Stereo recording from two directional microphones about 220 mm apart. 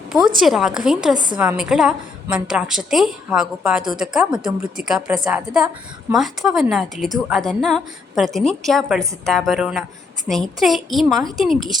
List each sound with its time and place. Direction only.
0.3 s a woman's voice: centre (ahead or behind)